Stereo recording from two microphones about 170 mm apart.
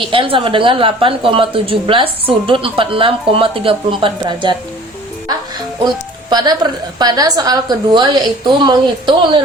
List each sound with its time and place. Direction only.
0.0 s a woman's voice: 30° right (ahead or behind)
6.3 s a woman's voice: 25° right (ahead or behind)